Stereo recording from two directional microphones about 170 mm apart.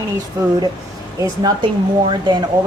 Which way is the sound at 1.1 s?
25° right (ahead or behind).